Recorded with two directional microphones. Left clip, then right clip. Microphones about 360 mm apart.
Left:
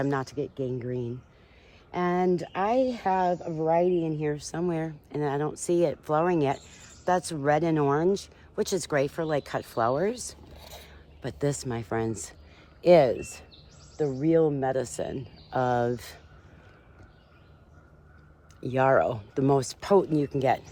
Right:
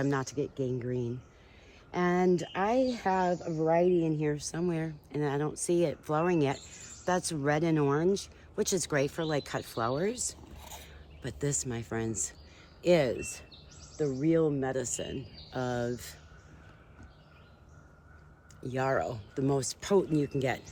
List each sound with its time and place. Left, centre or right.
0.0 s speech: centre
18.6 s speech: left